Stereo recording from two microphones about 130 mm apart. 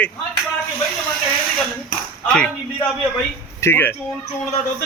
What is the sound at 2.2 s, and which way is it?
Speech, 10° left (ahead or behind).